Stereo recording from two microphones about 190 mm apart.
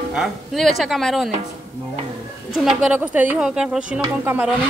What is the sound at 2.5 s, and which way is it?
A woman's voice, 5° right (ahead or behind).